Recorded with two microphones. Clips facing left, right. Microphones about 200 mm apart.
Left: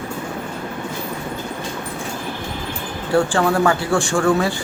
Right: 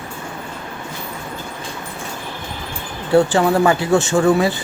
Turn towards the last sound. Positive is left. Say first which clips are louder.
# right 3 dB
turn(degrees=-20)  # may be behind; listen again after turning